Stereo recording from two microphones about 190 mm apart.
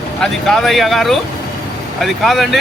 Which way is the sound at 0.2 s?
Centre (ahead or behind).